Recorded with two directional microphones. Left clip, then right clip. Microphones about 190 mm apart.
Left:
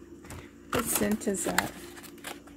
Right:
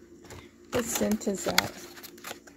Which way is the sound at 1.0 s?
25° right (ahead or behind).